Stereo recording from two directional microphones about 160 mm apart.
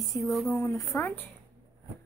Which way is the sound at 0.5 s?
20° left (ahead or behind).